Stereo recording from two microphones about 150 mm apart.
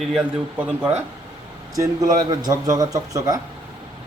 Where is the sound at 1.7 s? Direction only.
25° right (ahead or behind).